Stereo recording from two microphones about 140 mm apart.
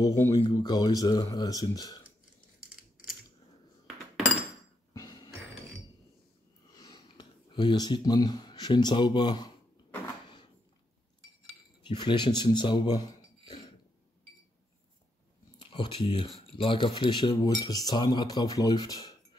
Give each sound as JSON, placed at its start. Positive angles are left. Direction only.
{"t": 0.0, "sound": "speech", "side_deg": 20}
{"t": 4.9, "sound": "music", "side_deg": 25}
{"t": 6.7, "sound": "speech", "side_deg": 30}
{"t": 11.8, "sound": "speech", "side_deg": 30}
{"t": 15.6, "sound": "speech", "side_deg": 35}